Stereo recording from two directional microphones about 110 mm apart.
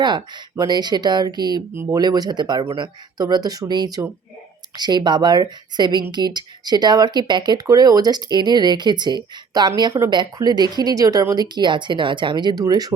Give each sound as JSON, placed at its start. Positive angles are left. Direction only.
{"t": 0.0, "sound": "speech", "side_deg": -40}
{"t": 1.7, "sound": "speech", "side_deg": -20}
{"t": 2.0, "sound": "speech", "side_deg": -40}